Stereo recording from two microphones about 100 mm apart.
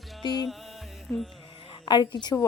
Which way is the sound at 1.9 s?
45° left (ahead or behind).